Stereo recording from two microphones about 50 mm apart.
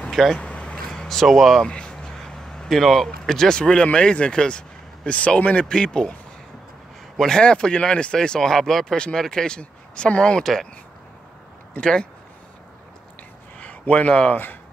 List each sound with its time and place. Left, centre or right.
0.1 s speech: centre
0.4 s vehicle: left
0.7 s a sound: centre
1.6 s a sound: centre
2.7 s speech: centre
7.2 s speech: centre
10.4 s speech: centre
11.8 s speech: centre
13.6 s speech: left